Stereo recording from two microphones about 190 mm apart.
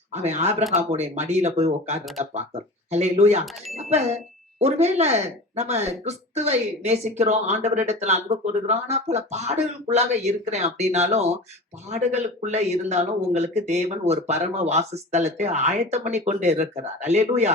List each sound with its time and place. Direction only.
0.1 s speech: 35° right (ahead or behind)